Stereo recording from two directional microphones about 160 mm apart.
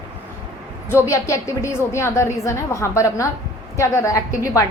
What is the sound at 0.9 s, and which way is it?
A woman's voice, 15° left (ahead or behind).